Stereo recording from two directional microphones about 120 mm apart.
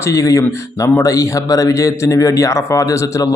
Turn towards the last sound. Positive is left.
turn(degrees=30)  # may be behind; listen again after turning